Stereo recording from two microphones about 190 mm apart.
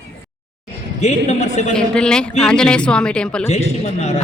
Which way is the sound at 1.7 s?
5° left (ahead or behind).